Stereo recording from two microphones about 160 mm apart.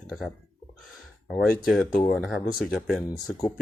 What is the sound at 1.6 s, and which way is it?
Speech, centre (ahead or behind).